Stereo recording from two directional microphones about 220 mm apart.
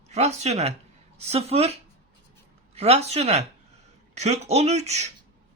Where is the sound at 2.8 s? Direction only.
25° right (ahead or behind).